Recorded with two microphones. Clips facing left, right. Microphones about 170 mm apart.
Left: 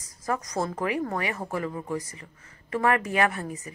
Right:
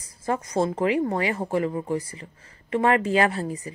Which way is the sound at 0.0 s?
30° right (ahead or behind).